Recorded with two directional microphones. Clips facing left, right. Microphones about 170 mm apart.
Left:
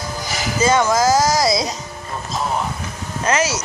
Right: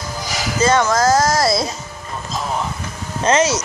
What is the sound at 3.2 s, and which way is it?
Speech, 30° right (ahead or behind).